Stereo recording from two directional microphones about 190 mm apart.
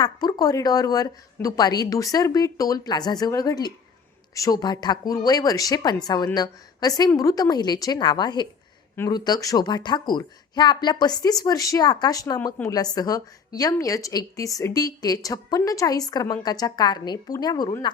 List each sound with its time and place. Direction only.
0.0 s a woman's voice: 20° left (ahead or behind)